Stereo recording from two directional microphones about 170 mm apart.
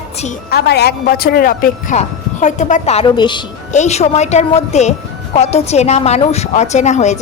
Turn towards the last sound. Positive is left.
turn(degrees=40)  # may be behind; listen again after turning